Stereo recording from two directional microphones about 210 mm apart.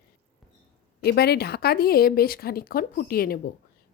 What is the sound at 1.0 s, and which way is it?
Speech, 50° left (ahead or behind).